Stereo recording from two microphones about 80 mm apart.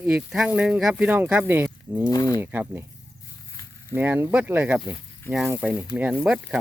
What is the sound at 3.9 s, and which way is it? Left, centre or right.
Speech, right.